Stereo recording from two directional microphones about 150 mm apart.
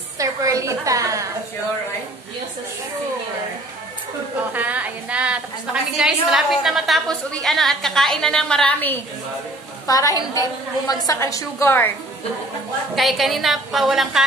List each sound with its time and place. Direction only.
0.2 s a woman's voice: 20° right (ahead or behind)
4.5 s a woman's voice: 10° right (ahead or behind); by 8.9 s 5° left (ahead or behind)
9.8 s a woman's voice: 25° left (ahead or behind)
12.9 s a woman's voice: centre (ahead or behind)